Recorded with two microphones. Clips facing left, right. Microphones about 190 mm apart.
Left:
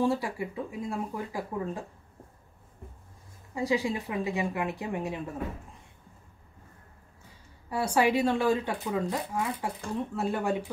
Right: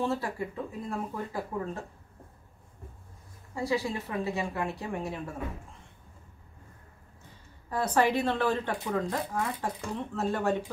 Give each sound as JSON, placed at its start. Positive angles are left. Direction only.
{"t": 0.0, "sound": "speech", "side_deg": 15}
{"t": 3.5, "sound": "speech", "side_deg": 15}
{"t": 7.7, "sound": "speech", "side_deg": 10}